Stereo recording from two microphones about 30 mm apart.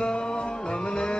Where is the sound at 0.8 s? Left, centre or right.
Left.